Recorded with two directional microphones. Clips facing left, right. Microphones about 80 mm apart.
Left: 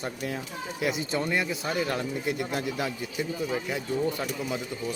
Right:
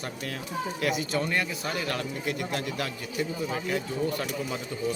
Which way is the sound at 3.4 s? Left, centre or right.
Centre.